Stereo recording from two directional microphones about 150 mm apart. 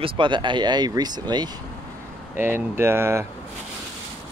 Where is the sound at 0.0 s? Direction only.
35° right (ahead or behind).